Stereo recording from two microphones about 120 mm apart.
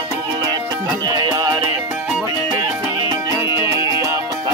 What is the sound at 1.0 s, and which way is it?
Music, 30° right (ahead or behind).